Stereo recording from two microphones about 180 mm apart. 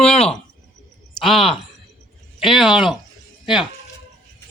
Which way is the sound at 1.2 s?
Centre (ahead or behind).